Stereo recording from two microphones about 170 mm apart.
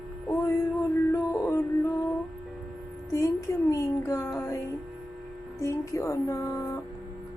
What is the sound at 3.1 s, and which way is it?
Music, 20° left (ahead or behind).